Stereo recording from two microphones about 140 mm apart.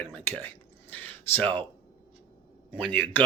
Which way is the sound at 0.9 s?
15° left (ahead or behind).